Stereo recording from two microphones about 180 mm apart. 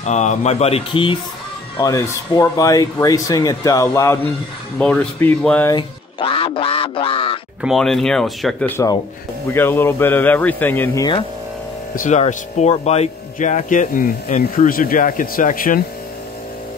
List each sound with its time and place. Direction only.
0.0 s speech: 40° left (ahead or behind)
1.8 s a man's voice: 20° left (ahead or behind)
5.7 s speech: 25° left (ahead or behind)
7.6 s speech: centre (ahead or behind)
8.6 s a man's voice: 15° left (ahead or behind)
11.9 s speech: 45° left (ahead or behind)